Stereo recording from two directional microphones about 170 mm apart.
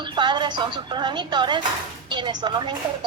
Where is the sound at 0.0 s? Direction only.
25° right (ahead or behind).